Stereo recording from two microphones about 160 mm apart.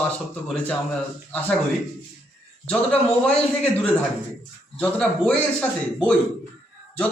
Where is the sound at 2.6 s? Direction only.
10° left (ahead or behind).